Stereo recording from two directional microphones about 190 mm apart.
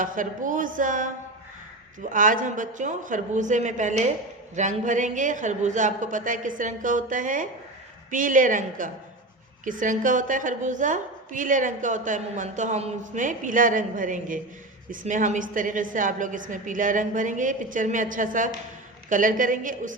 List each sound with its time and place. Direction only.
0.0 s a woman's voice: 45° right (ahead or behind)